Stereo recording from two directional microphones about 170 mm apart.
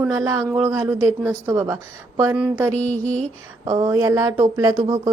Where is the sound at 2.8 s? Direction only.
10° left (ahead or behind).